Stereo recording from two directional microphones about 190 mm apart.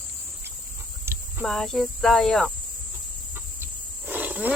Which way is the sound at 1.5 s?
Centre (ahead or behind).